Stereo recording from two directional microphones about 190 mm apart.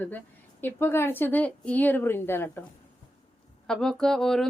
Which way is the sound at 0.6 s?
10° left (ahead or behind).